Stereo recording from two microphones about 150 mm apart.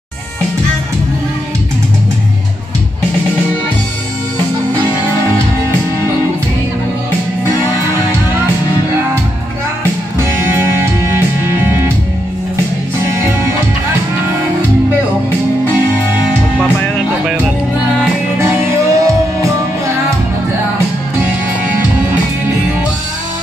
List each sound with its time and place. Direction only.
10.5 s music: 15° right (ahead or behind)
18.4 s music: 15° right (ahead or behind)